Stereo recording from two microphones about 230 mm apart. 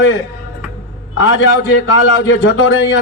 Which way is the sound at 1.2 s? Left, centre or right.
Left.